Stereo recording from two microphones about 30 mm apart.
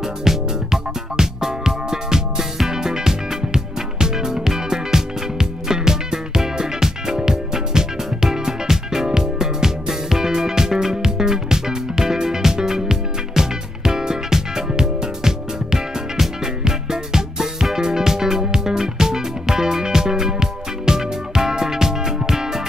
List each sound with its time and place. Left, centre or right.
0.2 s music: centre